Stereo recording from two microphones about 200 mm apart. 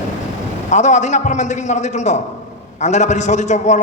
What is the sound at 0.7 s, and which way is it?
A man's voice, 35° left (ahead or behind).